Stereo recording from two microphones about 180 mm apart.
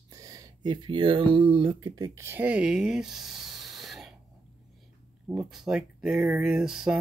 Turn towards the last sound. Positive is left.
turn(degrees=-5)  # may be behind; listen again after turning